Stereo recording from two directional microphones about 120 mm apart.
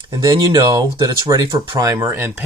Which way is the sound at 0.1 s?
35° right (ahead or behind).